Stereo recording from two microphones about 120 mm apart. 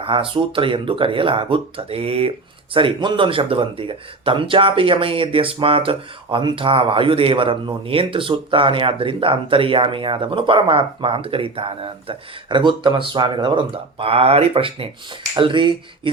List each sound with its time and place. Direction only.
0.0 s speech: 45° right (ahead or behind)
2.7 s speech: 45° right (ahead or behind)